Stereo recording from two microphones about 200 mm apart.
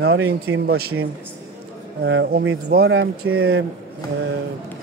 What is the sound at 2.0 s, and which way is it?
Speech, 65° right (ahead or behind).